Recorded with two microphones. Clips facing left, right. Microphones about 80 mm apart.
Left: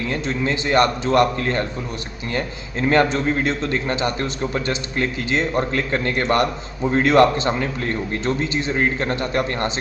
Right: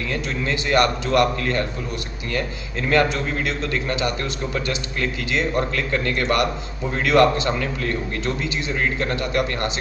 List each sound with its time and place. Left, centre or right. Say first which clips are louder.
0.1 s a man's voice: left 2 dB; left
2.9 s a man's voice: left 2 dB; left